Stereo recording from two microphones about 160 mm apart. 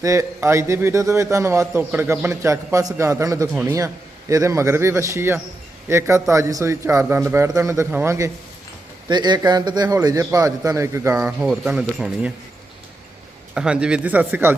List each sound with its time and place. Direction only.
0.0 s a man's voice: 20° right (ahead or behind)
9.0 s a man's voice: 30° right (ahead or behind)
11.1 s speech: 5° right (ahead or behind)
13.5 s a man's voice: 5° right (ahead or behind)